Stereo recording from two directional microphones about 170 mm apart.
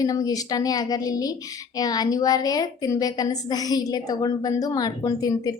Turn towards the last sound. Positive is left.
turn(degrees=20)  # may be behind; listen again after turning